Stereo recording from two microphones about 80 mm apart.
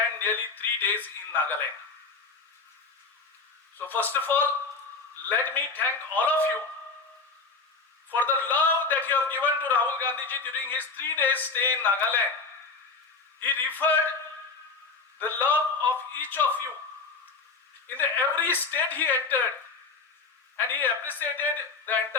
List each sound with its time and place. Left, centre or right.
0.2 s a man's voice: left
3.8 s a man's voice: left
8.1 s a man's voice: left
13.4 s a man's voice: left
15.2 s a man's voice: left
17.8 s a man's voice: left
20.6 s a man's voice: left